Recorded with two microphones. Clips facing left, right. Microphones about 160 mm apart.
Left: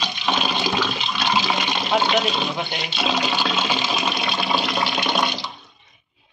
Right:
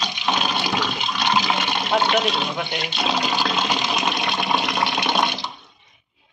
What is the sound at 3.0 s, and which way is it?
Toilet flush, 10° right (ahead or behind).